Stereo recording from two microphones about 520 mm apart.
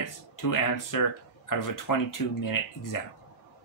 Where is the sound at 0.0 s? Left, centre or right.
Left.